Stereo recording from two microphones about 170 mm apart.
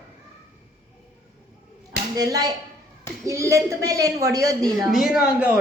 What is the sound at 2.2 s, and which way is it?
A man's voice, 20° right (ahead or behind).